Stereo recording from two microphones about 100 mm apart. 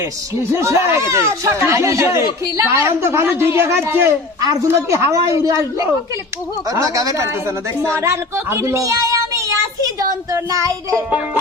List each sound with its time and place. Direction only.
0.5 s speech: 30° right (ahead or behind)
4.4 s a woman's voice: 40° right (ahead or behind)